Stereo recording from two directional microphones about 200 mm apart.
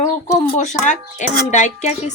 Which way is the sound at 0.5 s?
35° left (ahead or behind).